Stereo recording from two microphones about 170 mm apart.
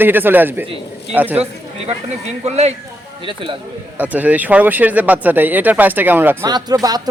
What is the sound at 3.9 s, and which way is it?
Speech, 10° right (ahead or behind).